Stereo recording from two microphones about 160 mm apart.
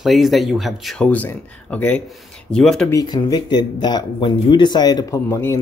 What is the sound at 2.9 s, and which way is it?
Speech, 20° left (ahead or behind).